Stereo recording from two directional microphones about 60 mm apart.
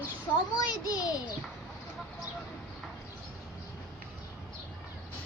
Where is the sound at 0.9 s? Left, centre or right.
Left.